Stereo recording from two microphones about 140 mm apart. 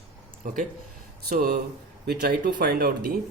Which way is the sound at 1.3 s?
90° right.